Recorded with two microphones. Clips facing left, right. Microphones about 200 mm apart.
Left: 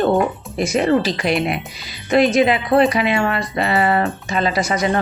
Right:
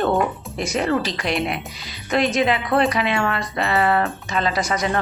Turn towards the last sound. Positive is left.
turn(degrees=5)  # may be behind; listen again after turning